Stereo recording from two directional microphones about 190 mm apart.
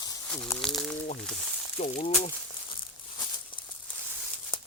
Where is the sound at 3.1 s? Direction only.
25° left (ahead or behind).